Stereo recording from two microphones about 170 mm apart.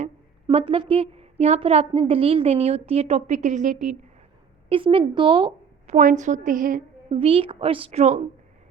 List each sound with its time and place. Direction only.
0.4 s a woman's voice: 30° right (ahead or behind); by 3.9 s 45° right (ahead or behind)
4.7 s a woman's voice: 30° right (ahead or behind)
6.0 s a woman's voice: 50° right (ahead or behind)
7.1 s a woman's voice: 35° right (ahead or behind)